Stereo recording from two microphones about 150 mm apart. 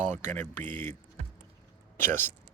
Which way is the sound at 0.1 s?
15° left (ahead or behind).